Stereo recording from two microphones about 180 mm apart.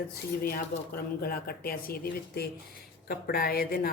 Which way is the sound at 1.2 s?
55° left (ahead or behind).